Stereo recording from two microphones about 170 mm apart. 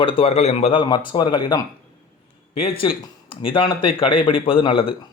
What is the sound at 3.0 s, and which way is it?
Speech, 30° left (ahead or behind).